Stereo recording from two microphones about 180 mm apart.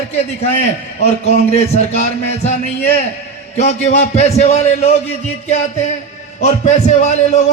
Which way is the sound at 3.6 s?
35° left (ahead or behind).